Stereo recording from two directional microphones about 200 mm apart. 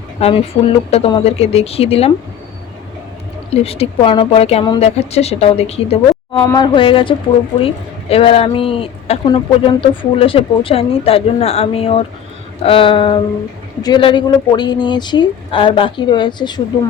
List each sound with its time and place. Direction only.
0.2 s speech: 30° left (ahead or behind)
3.5 s a woman's voice: 30° left (ahead or behind)
6.4 s speech: 20° left (ahead or behind)